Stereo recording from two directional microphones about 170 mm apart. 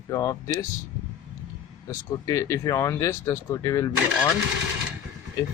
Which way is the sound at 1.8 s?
20° left (ahead or behind).